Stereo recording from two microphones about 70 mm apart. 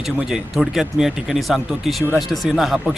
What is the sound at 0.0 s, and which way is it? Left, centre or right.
A man's voice, centre.